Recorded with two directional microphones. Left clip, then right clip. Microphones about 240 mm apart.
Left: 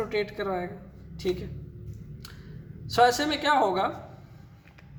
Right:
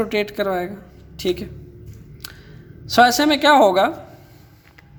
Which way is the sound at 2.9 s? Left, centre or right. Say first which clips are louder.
Right 8 dB; right.